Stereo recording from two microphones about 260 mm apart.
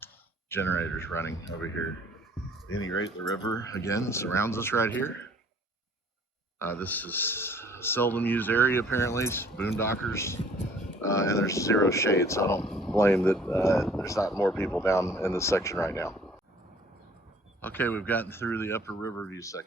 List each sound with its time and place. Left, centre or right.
0.0 s speech: centre
2.6 s speech: left
3.7 s speech: centre
6.6 s speech: centre
12.7 s a sound: centre
13.0 s speech: centre
13.7 s speech: centre
14.0 s speech: centre
17.6 s speech: centre